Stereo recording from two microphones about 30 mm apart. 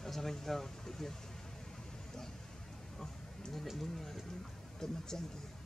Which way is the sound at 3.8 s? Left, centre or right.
Centre.